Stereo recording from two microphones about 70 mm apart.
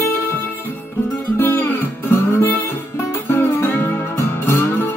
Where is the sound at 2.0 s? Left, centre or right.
Left.